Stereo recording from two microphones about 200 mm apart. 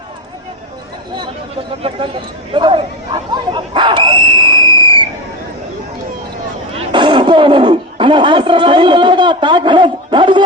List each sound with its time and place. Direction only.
2.5 s chatter: 25° right (ahead or behind)
6.7 s speech: 25° right (ahead or behind)